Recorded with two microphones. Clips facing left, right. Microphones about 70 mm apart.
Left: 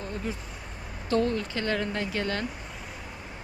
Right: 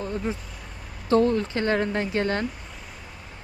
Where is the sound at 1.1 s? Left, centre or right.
Right.